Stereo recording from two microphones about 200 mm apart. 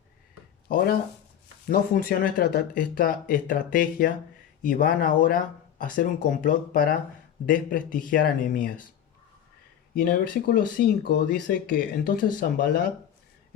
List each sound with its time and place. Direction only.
1.6 s speech: 45° left (ahead or behind)
9.9 s speech: 50° left (ahead or behind)